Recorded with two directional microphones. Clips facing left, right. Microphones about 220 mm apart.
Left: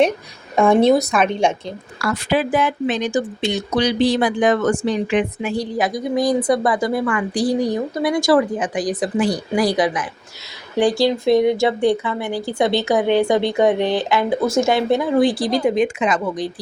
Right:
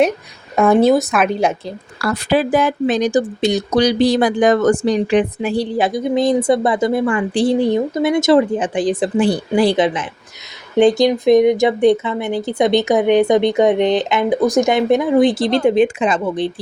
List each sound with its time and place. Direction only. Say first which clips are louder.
0.5 s a woman's voice: right 1 dB; 5° right (ahead or behind)
2.0 s speech: right 3 dB; 35° right (ahead or behind)